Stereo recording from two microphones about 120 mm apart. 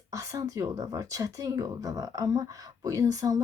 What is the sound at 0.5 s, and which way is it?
Speech, 30° right (ahead or behind).